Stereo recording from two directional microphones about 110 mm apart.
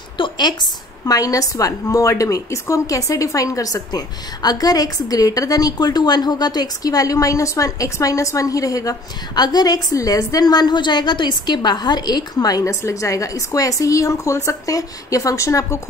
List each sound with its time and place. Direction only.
0.2 s a woman's voice: 40° left (ahead or behind)